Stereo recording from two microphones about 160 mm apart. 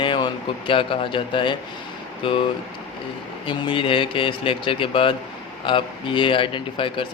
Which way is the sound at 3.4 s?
30° left (ahead or behind).